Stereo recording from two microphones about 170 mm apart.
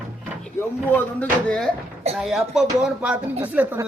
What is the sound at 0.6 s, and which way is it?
A woman's voice, 10° left (ahead or behind).